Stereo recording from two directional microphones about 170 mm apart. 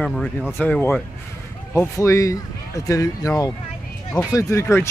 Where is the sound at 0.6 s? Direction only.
10° left (ahead or behind).